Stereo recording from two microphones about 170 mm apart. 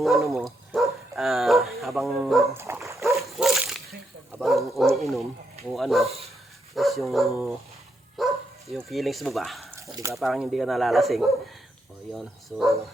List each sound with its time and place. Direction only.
0.3 s a sound: centre (ahead or behind)
1.8 s bow-wow: centre (ahead or behind)
2.4 s dog: 15° right (ahead or behind)
3.2 s dog: centre (ahead or behind)
4.4 s bow-wow: centre (ahead or behind)
5.7 s dog: centre (ahead or behind)
8.1 s bow-wow: centre (ahead or behind)
9.8 s a sound: 20° right (ahead or behind)
10.2 s speech: centre (ahead or behind)